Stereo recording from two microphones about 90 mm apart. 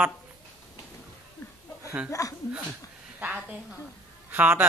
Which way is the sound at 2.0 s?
40° left (ahead or behind).